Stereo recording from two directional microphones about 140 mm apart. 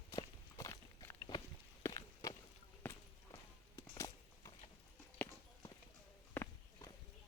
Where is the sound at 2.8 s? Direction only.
10° left (ahead or behind).